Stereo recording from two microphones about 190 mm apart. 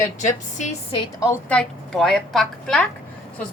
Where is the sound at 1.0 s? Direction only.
15° left (ahead or behind).